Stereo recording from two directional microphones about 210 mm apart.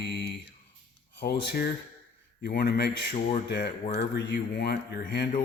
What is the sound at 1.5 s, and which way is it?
Speech, 50° left (ahead or behind).